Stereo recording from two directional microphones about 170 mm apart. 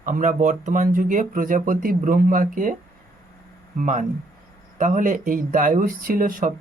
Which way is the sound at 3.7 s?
50° right (ahead or behind).